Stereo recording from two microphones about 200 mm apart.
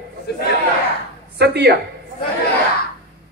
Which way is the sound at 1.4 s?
55° right (ahead or behind).